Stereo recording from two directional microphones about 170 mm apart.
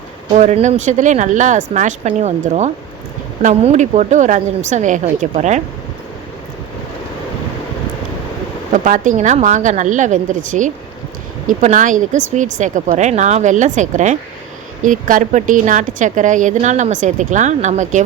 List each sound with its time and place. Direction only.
0.3 s a woman's voice: 45° right (ahead or behind)
8.7 s a woman's voice: 50° right (ahead or behind)